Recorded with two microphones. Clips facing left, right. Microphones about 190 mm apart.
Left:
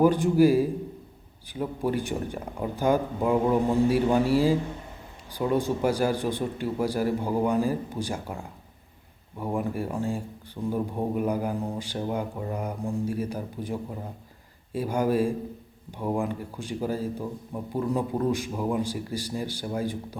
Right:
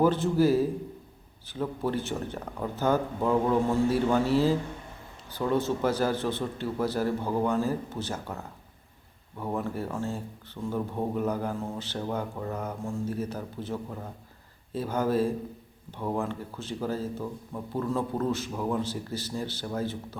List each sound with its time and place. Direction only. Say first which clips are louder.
0.0 s speech: left 3 dB; 15° left (ahead or behind)